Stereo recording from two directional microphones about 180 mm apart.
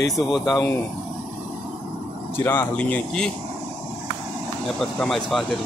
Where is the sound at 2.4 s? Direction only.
10° left (ahead or behind).